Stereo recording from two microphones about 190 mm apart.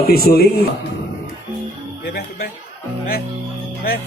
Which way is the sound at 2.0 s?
55° left (ahead or behind).